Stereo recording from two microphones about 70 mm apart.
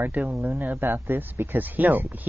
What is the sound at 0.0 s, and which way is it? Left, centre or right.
Speech, right.